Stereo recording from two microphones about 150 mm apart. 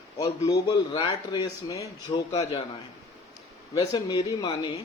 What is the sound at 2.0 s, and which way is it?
Speech, 40° left (ahead or behind).